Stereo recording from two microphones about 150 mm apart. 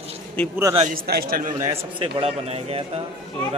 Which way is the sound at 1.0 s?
85° right.